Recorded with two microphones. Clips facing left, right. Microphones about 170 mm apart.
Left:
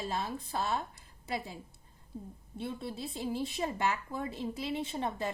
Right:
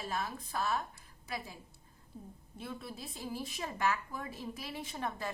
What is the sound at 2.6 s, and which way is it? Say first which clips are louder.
A woman's voice: left 6 dB; 30° left (ahead or behind).